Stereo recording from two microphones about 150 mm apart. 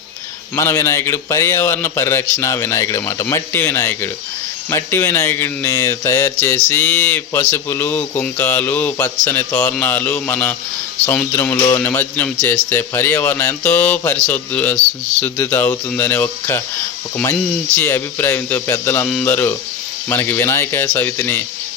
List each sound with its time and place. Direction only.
0.5 s a man's voice: 20° left (ahead or behind)